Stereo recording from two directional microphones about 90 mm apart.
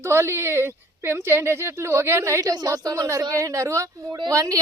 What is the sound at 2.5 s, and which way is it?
A woman's voice, 45° right (ahead or behind).